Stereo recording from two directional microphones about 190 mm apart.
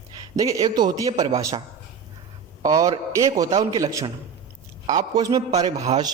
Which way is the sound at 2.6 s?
20° right (ahead or behind).